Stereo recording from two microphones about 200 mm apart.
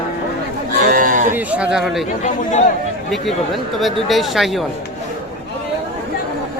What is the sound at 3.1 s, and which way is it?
Speech, centre (ahead or behind).